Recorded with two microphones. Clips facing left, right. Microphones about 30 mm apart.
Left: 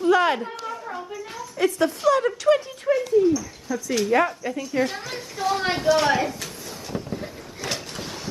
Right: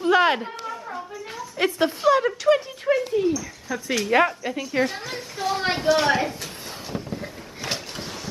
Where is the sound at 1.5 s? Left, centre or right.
Right.